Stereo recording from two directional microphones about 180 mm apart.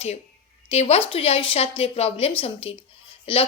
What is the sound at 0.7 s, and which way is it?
A woman's voice, 35° left (ahead or behind).